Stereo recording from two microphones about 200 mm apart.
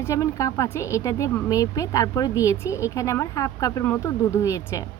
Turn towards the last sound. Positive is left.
turn(degrees=15)  # may be behind; listen again after turning